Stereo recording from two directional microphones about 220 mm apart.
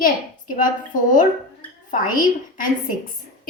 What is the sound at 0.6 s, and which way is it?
Speech, 35° left (ahead or behind).